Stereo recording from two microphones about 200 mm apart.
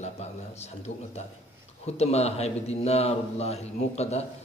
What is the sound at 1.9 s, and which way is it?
Speech, 30° left (ahead or behind).